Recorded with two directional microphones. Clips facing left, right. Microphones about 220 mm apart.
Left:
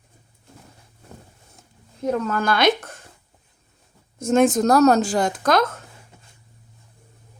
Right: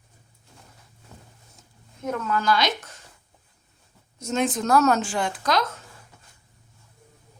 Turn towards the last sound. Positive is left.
turn(degrees=50)  # may be behind; listen again after turning